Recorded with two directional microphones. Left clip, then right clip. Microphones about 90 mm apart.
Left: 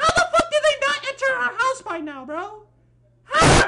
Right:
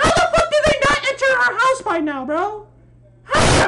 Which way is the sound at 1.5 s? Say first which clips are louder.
Right 6 dB; 20° left (ahead or behind).